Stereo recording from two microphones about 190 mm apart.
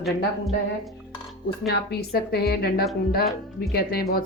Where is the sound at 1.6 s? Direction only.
55° left (ahead or behind).